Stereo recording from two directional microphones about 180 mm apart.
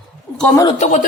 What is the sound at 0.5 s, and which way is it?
Speech, 20° left (ahead or behind).